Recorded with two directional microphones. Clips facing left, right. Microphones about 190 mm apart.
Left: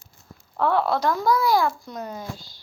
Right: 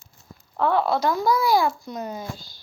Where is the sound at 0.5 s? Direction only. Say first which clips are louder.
Even; centre (ahead or behind).